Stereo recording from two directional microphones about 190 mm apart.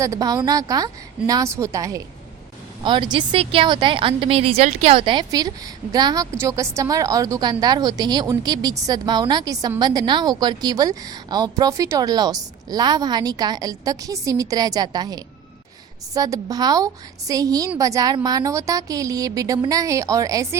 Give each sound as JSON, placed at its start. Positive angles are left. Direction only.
{"t": 0.0, "sound": "a woman's voice", "side_deg": -15}